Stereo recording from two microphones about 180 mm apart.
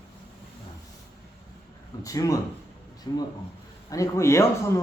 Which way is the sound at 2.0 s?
20° left (ahead or behind).